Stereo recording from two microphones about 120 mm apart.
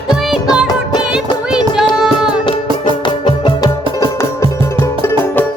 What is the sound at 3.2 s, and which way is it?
Music, 35° left (ahead or behind).